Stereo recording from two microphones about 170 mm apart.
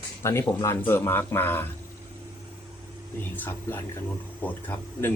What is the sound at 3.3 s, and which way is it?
Speech, 10° left (ahead or behind).